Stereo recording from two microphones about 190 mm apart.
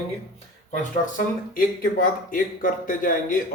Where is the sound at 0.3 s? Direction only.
45° left (ahead or behind).